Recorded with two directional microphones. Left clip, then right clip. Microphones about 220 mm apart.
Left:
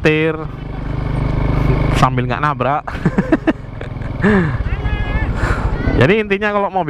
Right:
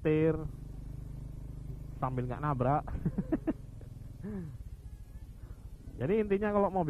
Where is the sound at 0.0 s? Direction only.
10° left (ahead or behind).